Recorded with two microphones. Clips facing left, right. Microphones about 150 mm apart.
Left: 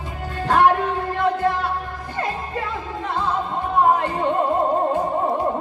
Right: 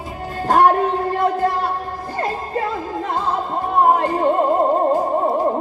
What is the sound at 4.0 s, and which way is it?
Opera, 40° right (ahead or behind).